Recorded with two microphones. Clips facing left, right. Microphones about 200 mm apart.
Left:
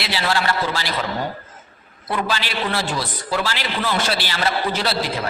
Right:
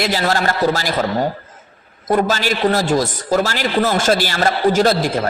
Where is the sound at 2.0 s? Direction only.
45° right (ahead or behind).